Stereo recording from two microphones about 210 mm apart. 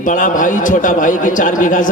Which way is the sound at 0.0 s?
40° left (ahead or behind).